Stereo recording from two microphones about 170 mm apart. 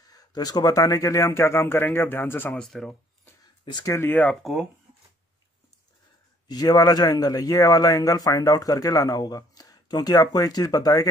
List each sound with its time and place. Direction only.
0.1 s speech: 20° left (ahead or behind); by 3.0 s 5° left (ahead or behind)
3.6 s speech: 25° left (ahead or behind); by 4.6 s centre (ahead or behind)
6.4 s speech: 25° left (ahead or behind)